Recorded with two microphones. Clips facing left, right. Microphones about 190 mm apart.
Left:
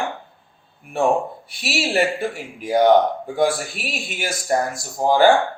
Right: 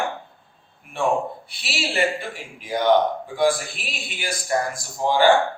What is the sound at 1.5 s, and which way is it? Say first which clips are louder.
A man's voice: left 6 dB; 45° left (ahead or behind).